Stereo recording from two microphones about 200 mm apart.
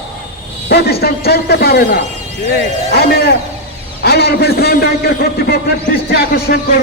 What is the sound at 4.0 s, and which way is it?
A man's voice, 55° left (ahead or behind).